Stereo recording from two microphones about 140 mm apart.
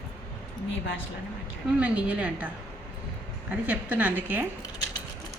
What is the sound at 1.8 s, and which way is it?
A woman's voice, 10° right (ahead or behind).